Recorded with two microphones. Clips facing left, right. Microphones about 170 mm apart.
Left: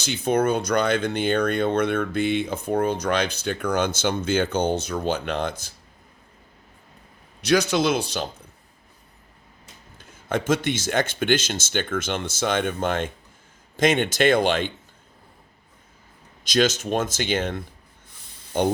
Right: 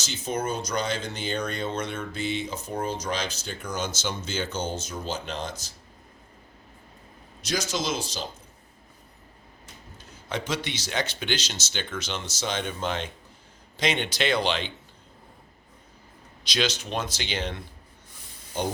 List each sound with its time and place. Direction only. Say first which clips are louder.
0.0 s speech: left 8 dB; 60° left (ahead or behind)
7.4 s speech: left 9 dB; 65° left (ahead or behind)
10.0 s speech: left 6 dB; 50° left (ahead or behind)
16.4 s speech: left 7 dB; 45° left (ahead or behind)
18.5 s speech: left 7 dB; 60° left (ahead or behind)